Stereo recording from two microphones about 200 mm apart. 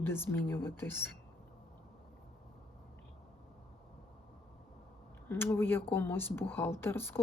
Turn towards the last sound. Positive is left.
turn(degrees=10)  # may be behind; listen again after turning